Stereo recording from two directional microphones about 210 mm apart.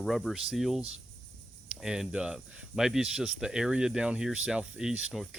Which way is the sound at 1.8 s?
Centre (ahead or behind).